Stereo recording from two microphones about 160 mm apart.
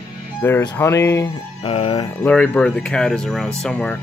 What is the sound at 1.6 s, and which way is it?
Speech, 35° left (ahead or behind).